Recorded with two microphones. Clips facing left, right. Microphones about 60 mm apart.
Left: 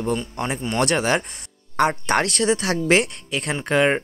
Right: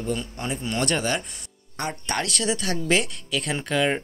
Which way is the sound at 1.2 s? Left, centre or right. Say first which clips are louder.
Left 3 dB; left.